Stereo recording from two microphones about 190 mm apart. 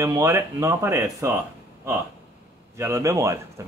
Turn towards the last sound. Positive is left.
turn(degrees=-15)  # may be behind; listen again after turning